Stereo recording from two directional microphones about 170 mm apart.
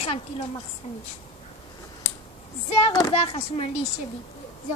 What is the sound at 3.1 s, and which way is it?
Speech, 35° left (ahead or behind).